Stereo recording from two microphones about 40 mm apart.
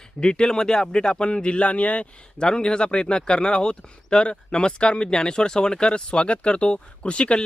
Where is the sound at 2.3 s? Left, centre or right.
Left.